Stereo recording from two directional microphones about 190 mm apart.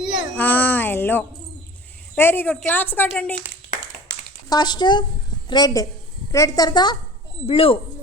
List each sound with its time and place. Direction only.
0.3 s a woman's voice: 10° left (ahead or behind)
4.4 s speech: 20° left (ahead or behind)